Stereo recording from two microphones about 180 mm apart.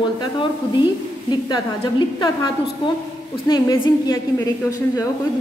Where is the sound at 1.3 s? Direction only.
25° left (ahead or behind).